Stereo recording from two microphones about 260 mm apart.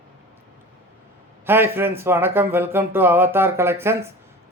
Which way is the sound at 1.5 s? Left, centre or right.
Centre.